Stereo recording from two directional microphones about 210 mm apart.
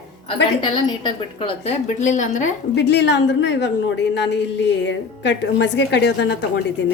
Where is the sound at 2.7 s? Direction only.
55° left (ahead or behind).